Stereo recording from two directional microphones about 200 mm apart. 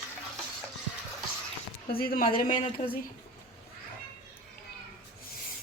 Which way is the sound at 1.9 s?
45° left (ahead or behind).